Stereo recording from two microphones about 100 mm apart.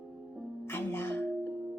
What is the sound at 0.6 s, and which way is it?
Speech, 20° left (ahead or behind).